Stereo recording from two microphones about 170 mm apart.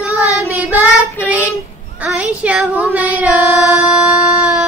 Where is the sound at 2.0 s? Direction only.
5° right (ahead or behind).